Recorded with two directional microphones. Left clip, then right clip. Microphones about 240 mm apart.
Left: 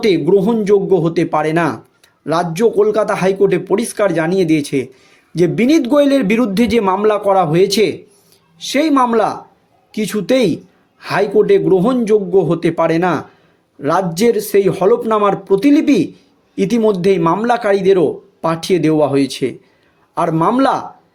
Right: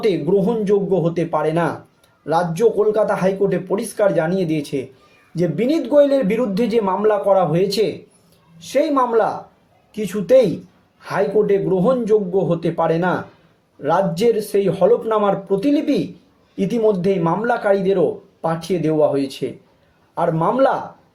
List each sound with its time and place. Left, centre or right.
0.0 s a man's voice: left